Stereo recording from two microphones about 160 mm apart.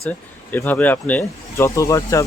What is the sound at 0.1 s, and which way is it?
Speech, 10° left (ahead or behind).